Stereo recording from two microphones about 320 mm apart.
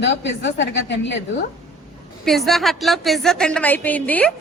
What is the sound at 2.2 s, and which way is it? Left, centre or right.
A woman's voice, centre.